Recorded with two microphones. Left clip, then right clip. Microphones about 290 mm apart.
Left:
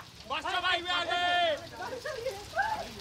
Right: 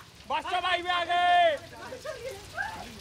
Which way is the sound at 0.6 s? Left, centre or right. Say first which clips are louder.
Right 2 dB; centre.